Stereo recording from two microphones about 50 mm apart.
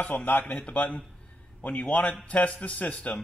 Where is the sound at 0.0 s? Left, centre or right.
Left.